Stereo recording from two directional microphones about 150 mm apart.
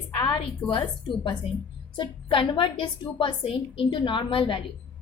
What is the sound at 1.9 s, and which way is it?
A woman's voice, 35° left (ahead or behind).